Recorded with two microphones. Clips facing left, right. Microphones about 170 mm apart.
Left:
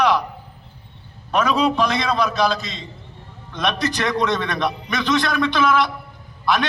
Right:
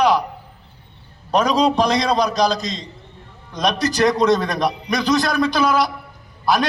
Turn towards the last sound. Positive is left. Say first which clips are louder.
# right 2 dB
turn(degrees=-40)  # may be behind; listen again after turning